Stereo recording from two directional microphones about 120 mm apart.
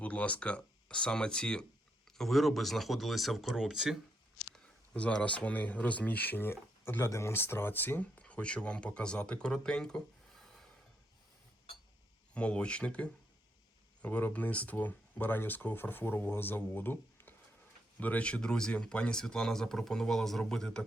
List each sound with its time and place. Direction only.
0.0 s speech: 10° left (ahead or behind); by 3.9 s 5° right (ahead or behind)
4.5 s speech: 10° left (ahead or behind)
12.3 s speech: 10° left (ahead or behind)